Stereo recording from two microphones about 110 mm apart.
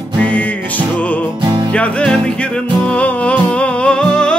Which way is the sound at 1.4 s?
40° right (ahead or behind).